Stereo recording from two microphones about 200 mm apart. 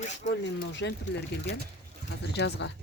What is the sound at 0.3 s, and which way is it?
Speech, 60° left (ahead or behind).